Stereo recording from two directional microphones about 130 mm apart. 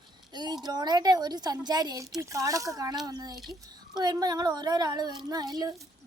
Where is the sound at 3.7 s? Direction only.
35° right (ahead or behind).